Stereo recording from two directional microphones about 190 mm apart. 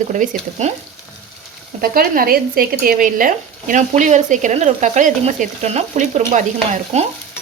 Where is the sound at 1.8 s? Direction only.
50° right (ahead or behind).